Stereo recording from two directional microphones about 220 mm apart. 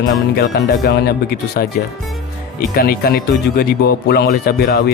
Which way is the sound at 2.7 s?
40° left (ahead or behind).